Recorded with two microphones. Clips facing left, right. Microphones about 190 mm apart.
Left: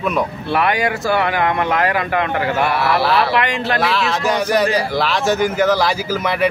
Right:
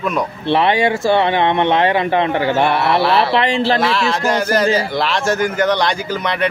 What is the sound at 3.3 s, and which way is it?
Speech, 30° right (ahead or behind).